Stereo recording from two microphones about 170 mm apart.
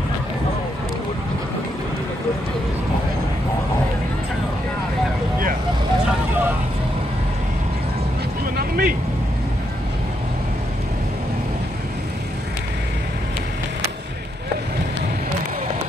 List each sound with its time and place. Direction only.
8.5 s vehicle: 55° right (ahead or behind)